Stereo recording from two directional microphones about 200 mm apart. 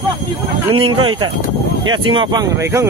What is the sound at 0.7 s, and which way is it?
Speech, 25° right (ahead or behind).